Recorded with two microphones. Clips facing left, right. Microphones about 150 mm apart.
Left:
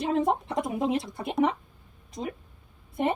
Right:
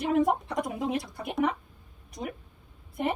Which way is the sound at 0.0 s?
25° left (ahead or behind).